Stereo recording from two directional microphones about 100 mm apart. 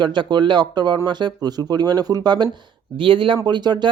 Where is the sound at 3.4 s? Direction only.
45° right (ahead or behind).